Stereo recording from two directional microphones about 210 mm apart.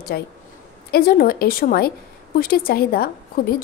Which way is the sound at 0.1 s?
50° left (ahead or behind).